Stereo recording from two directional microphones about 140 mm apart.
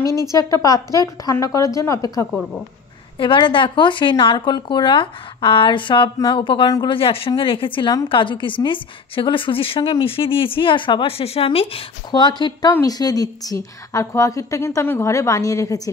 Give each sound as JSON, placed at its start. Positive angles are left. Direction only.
{"t": 0.0, "sound": "a woman's voice", "side_deg": -25}
{"t": 0.3, "sound": "a woman's voice", "side_deg": 25}
{"t": 3.2, "sound": "a woman's voice", "side_deg": 35}